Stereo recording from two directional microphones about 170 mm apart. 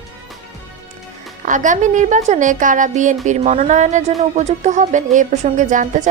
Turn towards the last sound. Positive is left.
turn(degrees=-50)  # may be behind; listen again after turning